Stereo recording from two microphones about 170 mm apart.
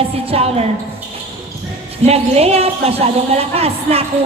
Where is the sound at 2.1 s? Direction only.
35° right (ahead or behind).